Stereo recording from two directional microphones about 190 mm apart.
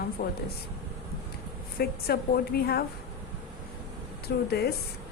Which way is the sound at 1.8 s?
55° left (ahead or behind).